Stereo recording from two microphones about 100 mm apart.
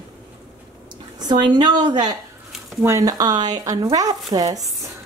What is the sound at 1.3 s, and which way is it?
Speech, 45° right (ahead or behind).